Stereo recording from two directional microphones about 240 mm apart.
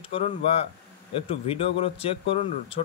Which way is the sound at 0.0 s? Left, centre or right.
Left.